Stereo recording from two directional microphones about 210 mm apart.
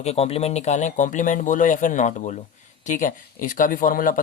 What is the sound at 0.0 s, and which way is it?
Speech, 30° left (ahead or behind).